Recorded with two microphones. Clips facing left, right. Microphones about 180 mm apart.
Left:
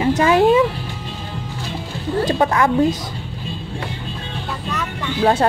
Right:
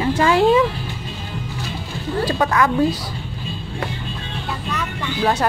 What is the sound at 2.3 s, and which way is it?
Speech, 30° left (ahead or behind).